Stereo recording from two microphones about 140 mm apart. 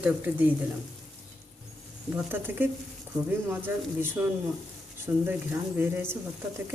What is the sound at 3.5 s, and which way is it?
A woman's voice, 15° right (ahead or behind).